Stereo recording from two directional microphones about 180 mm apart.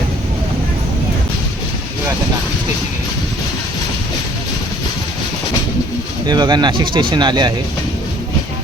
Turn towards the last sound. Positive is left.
turn(degrees=-25)  # may be behind; listen again after turning